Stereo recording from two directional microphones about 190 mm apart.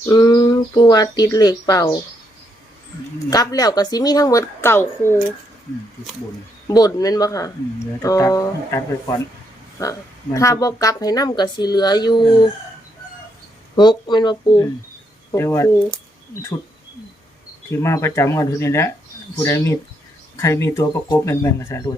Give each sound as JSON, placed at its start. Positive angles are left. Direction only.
{"t": 0.0, "sound": "a woman's voice", "side_deg": 20}
{"t": 3.2, "sound": "a woman's voice", "side_deg": 20}
{"t": 6.7, "sound": "a woman's voice", "side_deg": 20}
{"t": 13.7, "sound": "a woman's voice", "side_deg": 25}
{"t": 17.7, "sound": "speech", "side_deg": 15}